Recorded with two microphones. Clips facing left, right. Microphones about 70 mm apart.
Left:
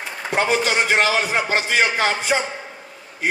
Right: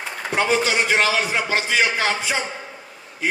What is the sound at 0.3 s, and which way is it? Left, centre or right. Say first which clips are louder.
A man's voice: left 1 dB; left.